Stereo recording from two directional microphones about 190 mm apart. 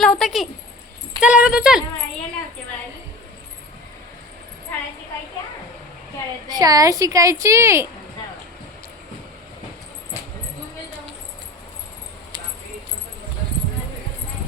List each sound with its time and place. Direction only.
0.0 s a sound: centre (ahead or behind)
1.2 s speech: 5° right (ahead or behind)
6.5 s a woman's voice: 20° right (ahead or behind)